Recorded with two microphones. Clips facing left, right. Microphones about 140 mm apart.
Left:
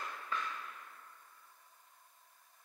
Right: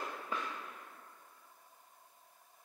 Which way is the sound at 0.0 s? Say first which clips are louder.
Right 1 dB; 15° right (ahead or behind).